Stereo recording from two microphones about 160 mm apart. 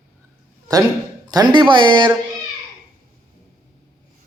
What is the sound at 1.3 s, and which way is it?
Speech, 25° right (ahead or behind).